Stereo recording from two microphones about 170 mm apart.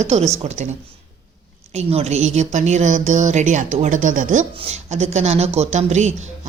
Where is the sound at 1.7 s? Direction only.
40° right (ahead or behind).